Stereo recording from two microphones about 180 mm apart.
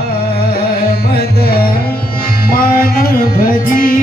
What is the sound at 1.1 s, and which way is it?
Music, 60° left (ahead or behind).